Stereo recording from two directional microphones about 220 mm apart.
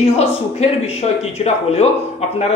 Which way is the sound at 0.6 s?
30° left (ahead or behind).